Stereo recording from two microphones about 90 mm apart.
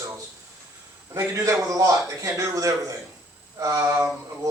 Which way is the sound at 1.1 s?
35° right (ahead or behind).